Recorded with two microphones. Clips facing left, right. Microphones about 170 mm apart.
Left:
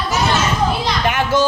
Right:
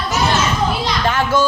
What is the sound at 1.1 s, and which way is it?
Speech, 15° left (ahead or behind).